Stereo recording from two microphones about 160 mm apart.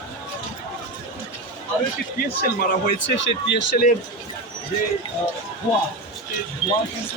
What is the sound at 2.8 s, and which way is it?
Speech, 90° left.